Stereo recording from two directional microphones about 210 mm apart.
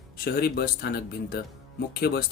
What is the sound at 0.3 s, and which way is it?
Speech, 45° left (ahead or behind).